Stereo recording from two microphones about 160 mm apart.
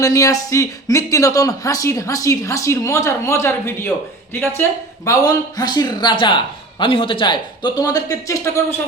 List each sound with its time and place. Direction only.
0.0 s speech: 20° left (ahead or behind)
5.0 s speech: 20° left (ahead or behind)